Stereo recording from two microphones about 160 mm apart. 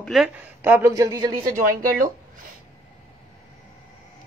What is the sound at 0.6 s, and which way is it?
Speech, 15° right (ahead or behind).